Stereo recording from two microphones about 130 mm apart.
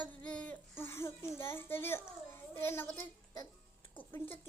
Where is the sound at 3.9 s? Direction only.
15° left (ahead or behind).